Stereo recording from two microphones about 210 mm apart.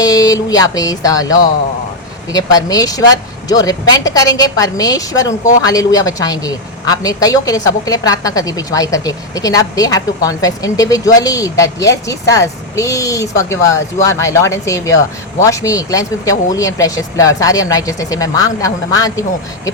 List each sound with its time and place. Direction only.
0.0 s speech: 15° left (ahead or behind)